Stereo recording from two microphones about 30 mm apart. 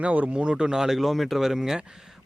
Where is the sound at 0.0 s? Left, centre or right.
Right.